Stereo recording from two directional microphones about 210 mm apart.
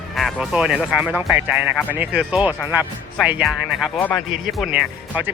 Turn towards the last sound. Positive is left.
turn(degrees=-5)  # may be behind; listen again after turning